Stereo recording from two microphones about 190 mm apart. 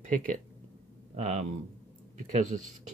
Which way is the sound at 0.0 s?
40° right (ahead or behind).